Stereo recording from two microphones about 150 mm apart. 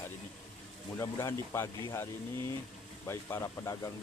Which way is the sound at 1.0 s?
20° left (ahead or behind).